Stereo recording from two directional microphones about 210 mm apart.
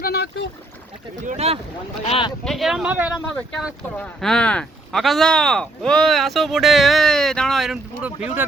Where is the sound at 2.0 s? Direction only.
25° left (ahead or behind).